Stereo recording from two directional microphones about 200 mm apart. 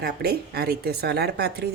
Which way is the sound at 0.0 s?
50° right (ahead or behind).